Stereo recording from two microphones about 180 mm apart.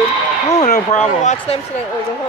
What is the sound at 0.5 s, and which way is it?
Speech, 40° left (ahead or behind).